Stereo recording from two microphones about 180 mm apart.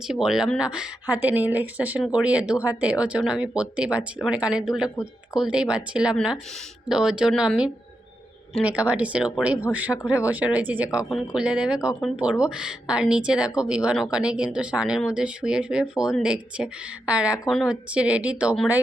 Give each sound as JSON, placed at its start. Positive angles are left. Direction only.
{"t": 0.1, "sound": "speech", "side_deg": -5}